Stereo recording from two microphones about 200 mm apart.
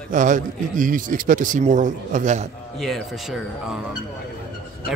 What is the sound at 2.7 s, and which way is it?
Speech, centre (ahead or behind).